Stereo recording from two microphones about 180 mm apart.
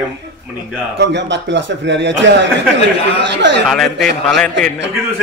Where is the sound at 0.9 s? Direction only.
75° right (ahead or behind).